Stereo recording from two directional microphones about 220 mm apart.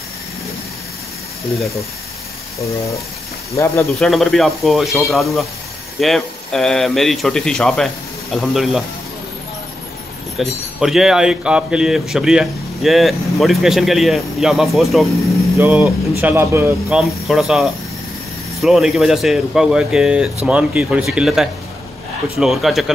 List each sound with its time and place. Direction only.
4.0 s speech: centre (ahead or behind)
10.3 s speech: centre (ahead or behind)